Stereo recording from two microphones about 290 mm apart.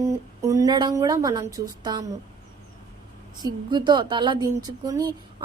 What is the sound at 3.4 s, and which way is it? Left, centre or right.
Speech, centre.